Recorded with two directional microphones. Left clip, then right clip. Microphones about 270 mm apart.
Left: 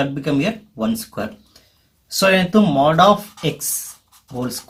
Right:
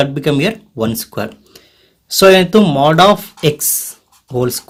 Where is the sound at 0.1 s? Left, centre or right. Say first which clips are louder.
Right 5 dB; right.